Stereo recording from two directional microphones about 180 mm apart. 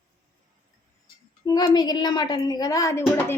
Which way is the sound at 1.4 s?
20° left (ahead or behind).